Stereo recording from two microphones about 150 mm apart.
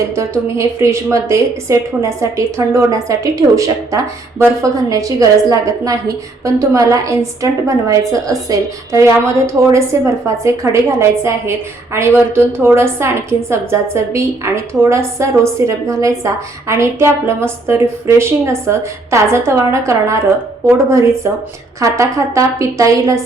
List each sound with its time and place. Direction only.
0.2 s a woman's voice: 20° right (ahead or behind)